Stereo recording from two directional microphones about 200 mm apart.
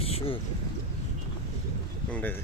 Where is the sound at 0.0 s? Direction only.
30° left (ahead or behind).